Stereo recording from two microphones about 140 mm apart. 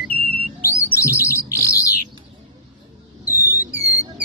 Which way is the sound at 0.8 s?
20° left (ahead or behind).